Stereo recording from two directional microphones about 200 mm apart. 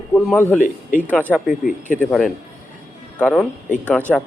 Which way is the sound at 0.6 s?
40° left (ahead or behind).